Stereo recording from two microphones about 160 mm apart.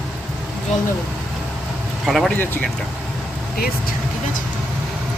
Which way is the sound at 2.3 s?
10° left (ahead or behind).